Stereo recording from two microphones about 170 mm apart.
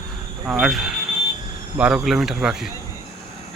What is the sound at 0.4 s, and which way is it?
Speech, 5° right (ahead or behind).